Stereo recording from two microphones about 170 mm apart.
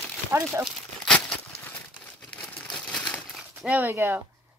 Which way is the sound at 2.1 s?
5° left (ahead or behind).